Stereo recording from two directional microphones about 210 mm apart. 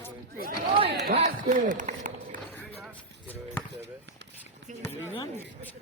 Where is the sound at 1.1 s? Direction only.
35° right (ahead or behind).